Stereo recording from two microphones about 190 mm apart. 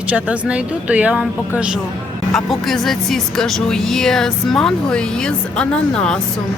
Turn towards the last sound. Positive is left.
turn(degrees=5)  # may be behind; listen again after turning